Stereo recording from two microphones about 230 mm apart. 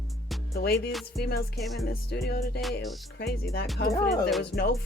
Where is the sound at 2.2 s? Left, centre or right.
Left.